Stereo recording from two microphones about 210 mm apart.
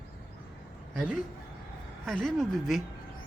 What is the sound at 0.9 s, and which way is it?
Speech, 5° right (ahead or behind).